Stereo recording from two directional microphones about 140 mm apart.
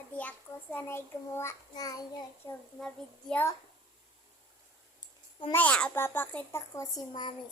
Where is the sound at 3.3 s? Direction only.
5° left (ahead or behind).